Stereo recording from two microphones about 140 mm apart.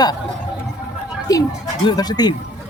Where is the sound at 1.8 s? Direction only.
30° left (ahead or behind).